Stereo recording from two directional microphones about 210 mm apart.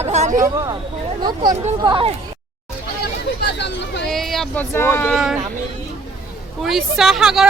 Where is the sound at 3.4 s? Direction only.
55° left (ahead or behind).